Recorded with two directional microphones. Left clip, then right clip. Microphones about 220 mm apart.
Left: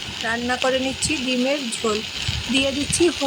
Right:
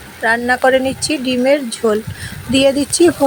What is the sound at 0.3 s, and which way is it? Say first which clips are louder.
Speech: right 9 dB; 15° right (ahead or behind).